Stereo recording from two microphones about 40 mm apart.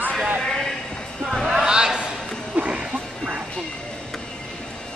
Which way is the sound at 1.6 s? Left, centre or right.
Centre.